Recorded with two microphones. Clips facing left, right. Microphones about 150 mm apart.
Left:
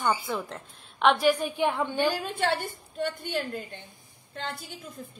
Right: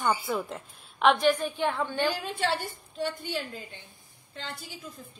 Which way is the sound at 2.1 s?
50° left (ahead or behind).